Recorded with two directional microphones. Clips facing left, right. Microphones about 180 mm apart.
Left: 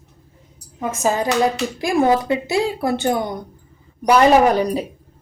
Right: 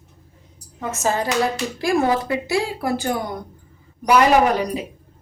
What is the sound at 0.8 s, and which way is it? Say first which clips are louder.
A woman's voice: left 2 dB; 15° left (ahead or behind).